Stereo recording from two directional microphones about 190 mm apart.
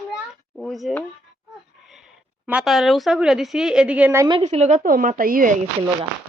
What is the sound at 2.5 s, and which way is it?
A woman's voice, 5° right (ahead or behind).